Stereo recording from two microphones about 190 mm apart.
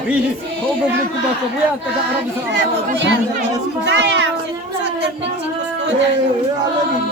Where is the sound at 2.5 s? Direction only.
70° right (ahead or behind).